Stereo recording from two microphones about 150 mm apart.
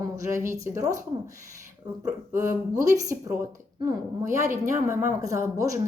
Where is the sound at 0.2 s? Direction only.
20° right (ahead or behind).